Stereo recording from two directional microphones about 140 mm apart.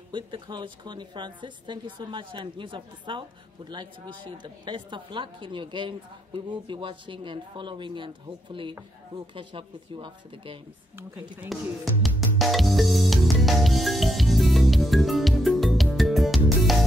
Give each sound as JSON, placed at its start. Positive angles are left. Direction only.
{"t": 0.1, "sound": "a woman's voice", "side_deg": -35}
{"t": 11.5, "sound": "speech", "side_deg": 0}
{"t": 12.0, "sound": "music", "side_deg": 0}